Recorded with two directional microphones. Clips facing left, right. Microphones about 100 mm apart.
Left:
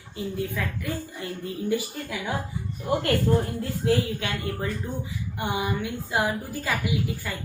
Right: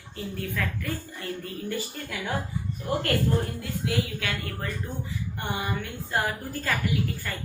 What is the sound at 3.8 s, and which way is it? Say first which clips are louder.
Speech: left 5 dB; 30° left (ahead or behind).